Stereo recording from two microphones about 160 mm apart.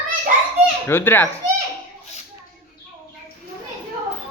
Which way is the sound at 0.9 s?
15° left (ahead or behind).